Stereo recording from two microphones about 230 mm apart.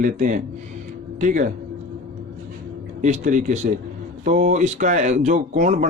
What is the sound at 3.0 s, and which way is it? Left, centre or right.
Speech, right.